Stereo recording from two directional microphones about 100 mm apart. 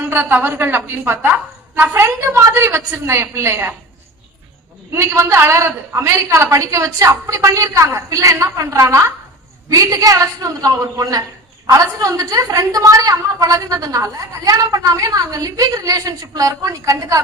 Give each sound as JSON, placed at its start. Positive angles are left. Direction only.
{"t": 0.0, "sound": "a woman's voice", "side_deg": -20}
{"t": 4.9, "sound": "a woman's voice", "side_deg": -30}